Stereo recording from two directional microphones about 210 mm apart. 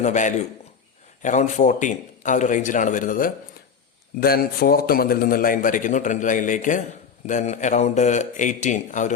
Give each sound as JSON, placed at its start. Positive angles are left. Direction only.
{"t": 0.0, "sound": "a man's voice", "side_deg": 35}